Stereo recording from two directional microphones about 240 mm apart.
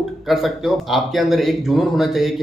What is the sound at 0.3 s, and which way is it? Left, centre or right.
Speech, centre.